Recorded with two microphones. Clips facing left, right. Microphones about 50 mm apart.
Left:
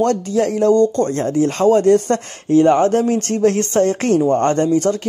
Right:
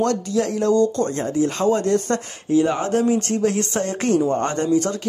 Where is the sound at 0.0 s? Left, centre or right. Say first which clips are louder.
Left 4 dB; left.